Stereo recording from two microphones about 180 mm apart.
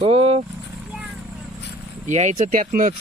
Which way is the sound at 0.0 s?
30° right (ahead or behind).